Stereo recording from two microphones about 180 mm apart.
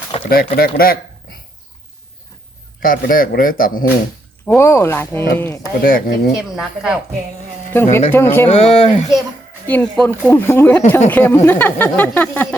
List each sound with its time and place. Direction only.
0.3 s speech: 55° left (ahead or behind)
2.8 s a man's voice: 50° left (ahead or behind)
4.4 s speech: 15° left (ahead or behind)
5.8 s speech: 55° left (ahead or behind)
6.3 s speech: 5° right (ahead or behind)
7.7 s speech: 10° left (ahead or behind)
8.4 s speech: 35° left (ahead or behind)
9.6 s speech: 10° left (ahead or behind)